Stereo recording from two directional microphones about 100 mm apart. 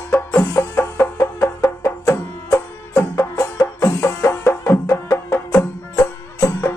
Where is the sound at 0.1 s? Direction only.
15° left (ahead or behind).